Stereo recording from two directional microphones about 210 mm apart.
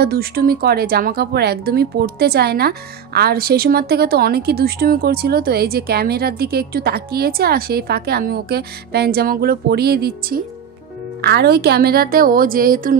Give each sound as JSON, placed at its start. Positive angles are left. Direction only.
{"t": 0.0, "sound": "a woman's voice", "side_deg": -45}